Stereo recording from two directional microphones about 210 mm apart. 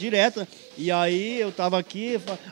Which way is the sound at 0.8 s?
10° right (ahead or behind).